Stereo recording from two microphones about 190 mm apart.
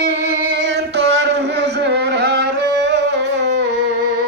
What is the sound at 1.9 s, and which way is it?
Music, 60° right (ahead or behind).